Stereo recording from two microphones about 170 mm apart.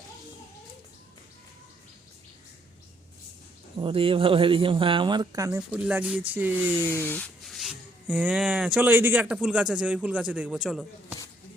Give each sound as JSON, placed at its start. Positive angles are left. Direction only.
{"t": 3.8, "sound": "speech", "side_deg": -30}
{"t": 5.5, "sound": "a man's voice", "side_deg": -5}
{"t": 6.8, "sound": "rub", "side_deg": 10}
{"t": 8.2, "sound": "a man's voice", "side_deg": -10}